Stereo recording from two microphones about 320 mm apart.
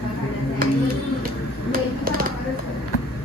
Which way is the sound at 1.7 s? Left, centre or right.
Right.